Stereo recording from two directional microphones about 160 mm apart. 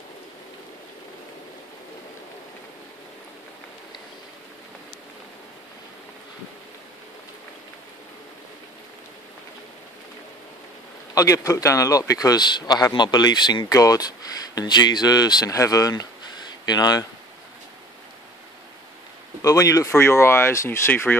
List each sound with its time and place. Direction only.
11.1 s a man's voice: 20° left (ahead or behind)
19.4 s speech: 20° left (ahead or behind)